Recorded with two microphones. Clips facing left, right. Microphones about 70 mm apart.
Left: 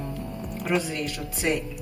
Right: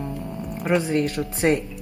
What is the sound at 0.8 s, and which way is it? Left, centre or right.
Speech, right.